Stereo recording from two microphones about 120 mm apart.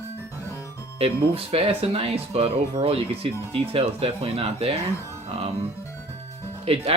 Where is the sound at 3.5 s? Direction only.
55° right (ahead or behind).